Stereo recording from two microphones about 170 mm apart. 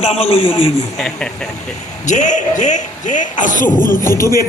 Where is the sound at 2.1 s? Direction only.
45° left (ahead or behind).